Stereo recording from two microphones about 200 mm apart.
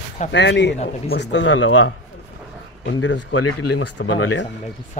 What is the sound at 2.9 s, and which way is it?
Speech, 75° left (ahead or behind).